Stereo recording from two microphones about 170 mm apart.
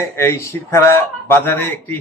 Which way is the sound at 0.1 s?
15° left (ahead or behind).